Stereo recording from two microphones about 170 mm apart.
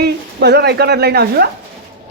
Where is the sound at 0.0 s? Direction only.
75° right (ahead or behind).